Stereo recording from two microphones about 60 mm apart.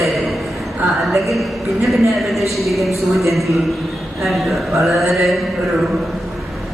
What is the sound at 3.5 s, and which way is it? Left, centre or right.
Speech, right.